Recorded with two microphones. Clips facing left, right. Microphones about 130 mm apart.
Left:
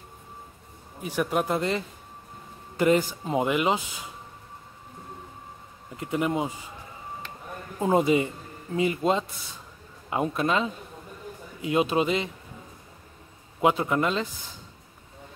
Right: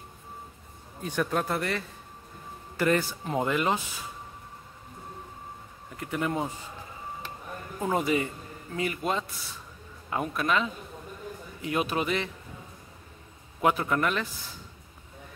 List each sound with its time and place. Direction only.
1.0 s speech: 10° left (ahead or behind)
5.9 s a man's voice: 20° left (ahead or behind)
7.8 s a man's voice: 25° left (ahead or behind)
13.6 s a man's voice: 20° left (ahead or behind)